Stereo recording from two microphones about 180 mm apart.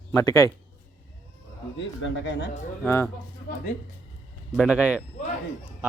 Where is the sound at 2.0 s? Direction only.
90° left.